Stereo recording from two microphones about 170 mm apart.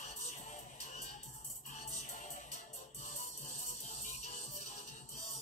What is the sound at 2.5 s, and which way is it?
Music, 45° left (ahead or behind).